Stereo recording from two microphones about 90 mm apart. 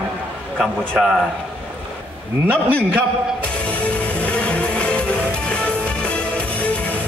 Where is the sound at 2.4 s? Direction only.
15° right (ahead or behind).